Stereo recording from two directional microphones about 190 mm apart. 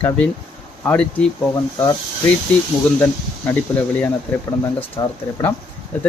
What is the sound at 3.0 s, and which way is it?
Speech, 10° left (ahead or behind).